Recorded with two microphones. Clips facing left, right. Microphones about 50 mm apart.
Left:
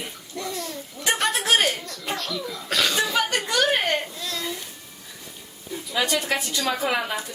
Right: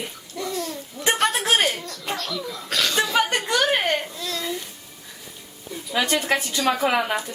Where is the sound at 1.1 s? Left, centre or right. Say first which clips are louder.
Even; centre.